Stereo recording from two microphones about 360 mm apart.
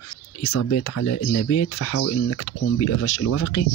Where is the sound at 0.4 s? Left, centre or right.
Left.